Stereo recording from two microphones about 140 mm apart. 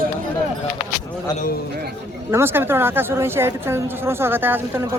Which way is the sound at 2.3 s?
15° right (ahead or behind).